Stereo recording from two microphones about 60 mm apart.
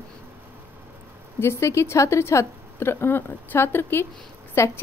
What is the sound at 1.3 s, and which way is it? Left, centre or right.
A woman's voice, left.